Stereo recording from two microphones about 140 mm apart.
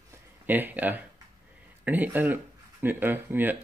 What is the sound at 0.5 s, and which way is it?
Speech, 15° right (ahead or behind).